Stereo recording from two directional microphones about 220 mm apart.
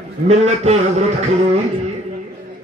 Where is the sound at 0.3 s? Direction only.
30° right (ahead or behind).